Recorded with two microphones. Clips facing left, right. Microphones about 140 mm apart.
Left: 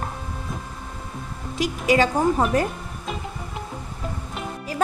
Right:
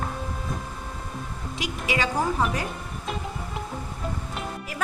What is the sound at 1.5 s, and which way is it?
A woman's voice, 40° left (ahead or behind).